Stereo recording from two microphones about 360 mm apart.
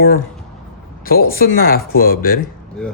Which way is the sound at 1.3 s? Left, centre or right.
Left.